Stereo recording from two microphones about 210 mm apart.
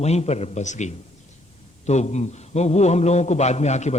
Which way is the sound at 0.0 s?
30° left (ahead or behind).